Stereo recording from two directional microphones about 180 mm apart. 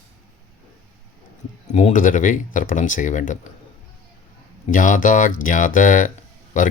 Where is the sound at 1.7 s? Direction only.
45° left (ahead or behind).